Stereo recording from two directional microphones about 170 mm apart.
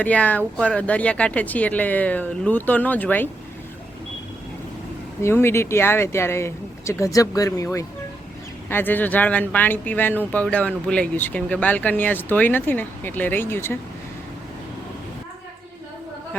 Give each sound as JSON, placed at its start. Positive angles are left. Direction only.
{"t": 0.0, "sound": "speech", "side_deg": 10}
{"t": 5.2, "sound": "speech", "side_deg": 15}